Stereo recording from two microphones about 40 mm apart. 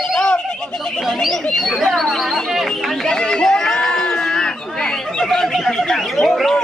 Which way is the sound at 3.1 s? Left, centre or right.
Centre.